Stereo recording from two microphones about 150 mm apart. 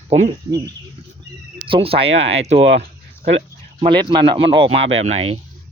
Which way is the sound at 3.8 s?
30° right (ahead or behind).